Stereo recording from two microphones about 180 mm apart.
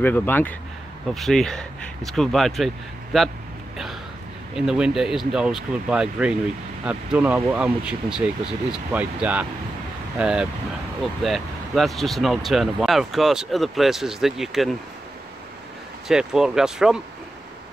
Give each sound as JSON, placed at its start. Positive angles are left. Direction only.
{"t": 0.0, "sound": "speech", "side_deg": 10}
{"t": 4.6, "sound": "speech", "side_deg": -5}
{"t": 16.1, "sound": "speech", "side_deg": -5}